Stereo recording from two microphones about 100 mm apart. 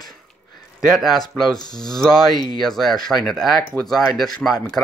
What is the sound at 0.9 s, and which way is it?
Speech, centre (ahead or behind).